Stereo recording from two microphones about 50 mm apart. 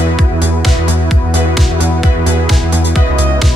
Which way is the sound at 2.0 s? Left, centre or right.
Centre.